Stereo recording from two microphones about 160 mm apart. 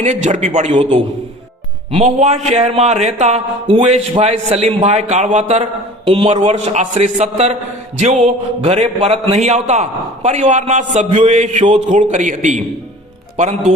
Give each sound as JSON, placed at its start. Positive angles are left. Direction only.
{"t": 0.0, "sound": "speech", "side_deg": -45}